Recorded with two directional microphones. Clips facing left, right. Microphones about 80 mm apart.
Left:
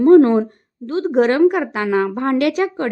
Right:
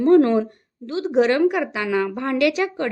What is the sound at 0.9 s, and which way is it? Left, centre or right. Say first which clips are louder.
Speech: left 3 dB; left.